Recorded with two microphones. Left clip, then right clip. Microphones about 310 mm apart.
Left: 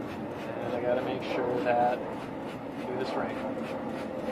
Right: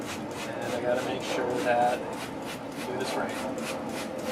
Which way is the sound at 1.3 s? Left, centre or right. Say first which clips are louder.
Right 1 dB; centre.